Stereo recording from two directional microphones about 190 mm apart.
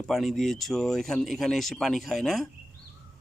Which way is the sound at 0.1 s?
Centre (ahead or behind).